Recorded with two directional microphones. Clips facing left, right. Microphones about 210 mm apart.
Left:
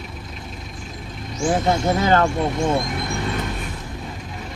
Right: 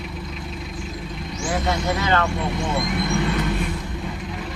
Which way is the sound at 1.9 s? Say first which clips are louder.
Left 4 dB; 45° left (ahead or behind).